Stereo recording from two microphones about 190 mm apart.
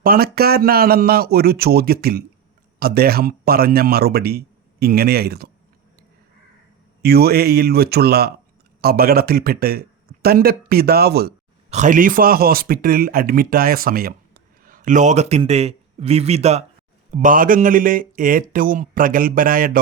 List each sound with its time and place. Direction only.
0.0 s a man's voice: 50° right (ahead or behind)
7.0 s a man's voice: 55° right (ahead or behind)
11.7 s a man's voice: 40° right (ahead or behind)